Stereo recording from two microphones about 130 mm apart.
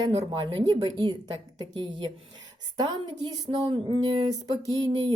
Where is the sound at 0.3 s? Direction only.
35° right (ahead or behind).